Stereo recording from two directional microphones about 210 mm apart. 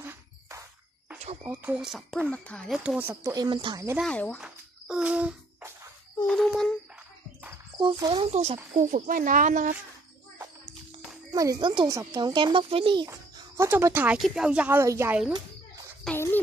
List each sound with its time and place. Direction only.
0.0 s music: 15° right (ahead or behind)
1.4 s a child's voice: 10° right (ahead or behind)
4.0 s music: 5° left (ahead or behind)
6.2 s a sound: centre (ahead or behind)
7.8 s speech: 20° right (ahead or behind)
8.3 s speech: 30° right (ahead or behind)
11.3 s a child's voice: 15° right (ahead or behind)
16.0 s a child's voice: 5° left (ahead or behind)